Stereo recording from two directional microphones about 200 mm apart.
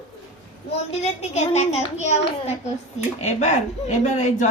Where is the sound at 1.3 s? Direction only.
35° left (ahead or behind).